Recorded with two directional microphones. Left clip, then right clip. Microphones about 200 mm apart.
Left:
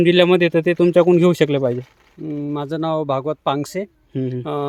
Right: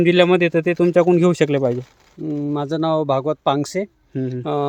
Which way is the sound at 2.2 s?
10° right (ahead or behind).